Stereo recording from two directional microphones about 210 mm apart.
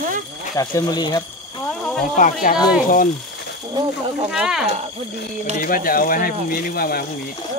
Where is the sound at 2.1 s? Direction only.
35° left (ahead or behind).